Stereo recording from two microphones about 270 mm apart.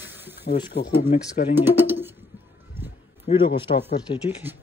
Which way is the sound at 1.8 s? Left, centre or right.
Centre.